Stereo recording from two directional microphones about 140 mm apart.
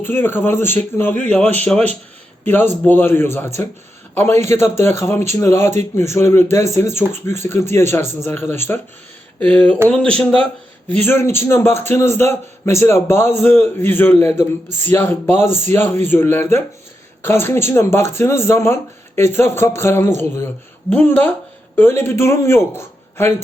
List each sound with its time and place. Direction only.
0.0 s a man's voice: 15° left (ahead or behind)
10.8 s a man's voice: 10° left (ahead or behind)